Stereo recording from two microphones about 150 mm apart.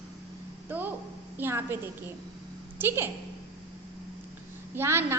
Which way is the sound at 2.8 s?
15° right (ahead or behind).